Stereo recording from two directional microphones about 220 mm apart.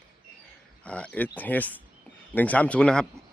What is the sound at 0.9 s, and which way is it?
A man's voice, 5° left (ahead or behind).